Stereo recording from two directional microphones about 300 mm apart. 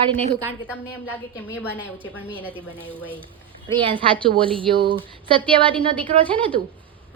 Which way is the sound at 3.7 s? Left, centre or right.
Centre.